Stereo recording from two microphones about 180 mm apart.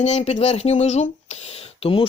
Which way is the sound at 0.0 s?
40° left (ahead or behind).